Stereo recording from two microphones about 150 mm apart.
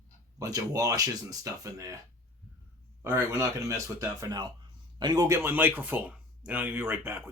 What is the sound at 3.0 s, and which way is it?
Speech, 15° right (ahead or behind).